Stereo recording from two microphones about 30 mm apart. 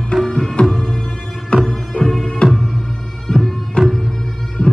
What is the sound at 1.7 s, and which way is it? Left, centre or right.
Music, centre.